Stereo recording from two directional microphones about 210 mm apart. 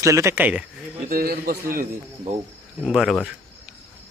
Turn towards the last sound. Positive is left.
turn(degrees=0)  # may be behind; listen again after turning